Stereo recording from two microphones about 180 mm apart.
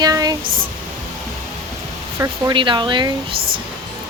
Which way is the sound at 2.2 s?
25° right (ahead or behind).